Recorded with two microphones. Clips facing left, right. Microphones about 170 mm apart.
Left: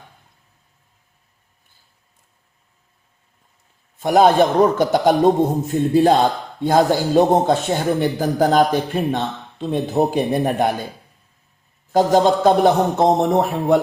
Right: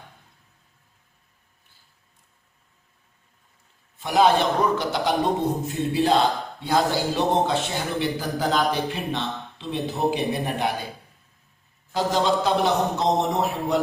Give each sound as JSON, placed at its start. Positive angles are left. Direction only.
{"t": 4.0, "sound": "a man's voice", "side_deg": 45}
{"t": 11.9, "sound": "a man's voice", "side_deg": 45}